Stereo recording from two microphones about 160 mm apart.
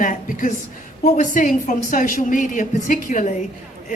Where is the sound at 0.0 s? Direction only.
55° left (ahead or behind).